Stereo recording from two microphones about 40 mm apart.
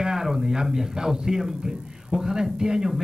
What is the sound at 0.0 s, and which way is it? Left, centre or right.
Speech, centre.